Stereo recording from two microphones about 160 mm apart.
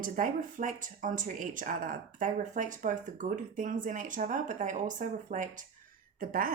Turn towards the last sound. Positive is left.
turn(degrees=-60)  # may be behind; listen again after turning